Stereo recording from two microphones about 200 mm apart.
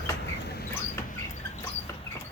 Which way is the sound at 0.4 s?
50° left (ahead or behind).